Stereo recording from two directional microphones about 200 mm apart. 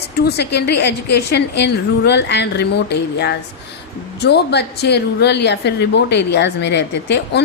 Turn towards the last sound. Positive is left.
turn(degrees=60)  # may be behind; listen again after turning